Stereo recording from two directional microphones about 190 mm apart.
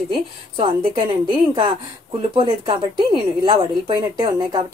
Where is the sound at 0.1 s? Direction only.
25° right (ahead or behind).